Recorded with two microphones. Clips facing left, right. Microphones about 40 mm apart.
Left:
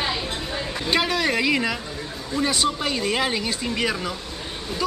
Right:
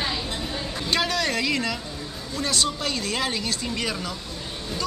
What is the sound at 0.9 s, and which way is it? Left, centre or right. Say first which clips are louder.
Speech: left 3 dB; centre.